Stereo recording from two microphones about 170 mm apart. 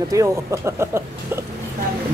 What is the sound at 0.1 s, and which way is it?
Speech, 20° right (ahead or behind).